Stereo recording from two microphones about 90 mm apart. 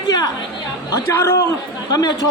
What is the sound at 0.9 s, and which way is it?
Speech, 30° left (ahead or behind).